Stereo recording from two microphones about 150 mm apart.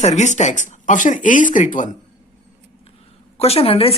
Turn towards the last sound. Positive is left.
turn(degrees=40)  # may be behind; listen again after turning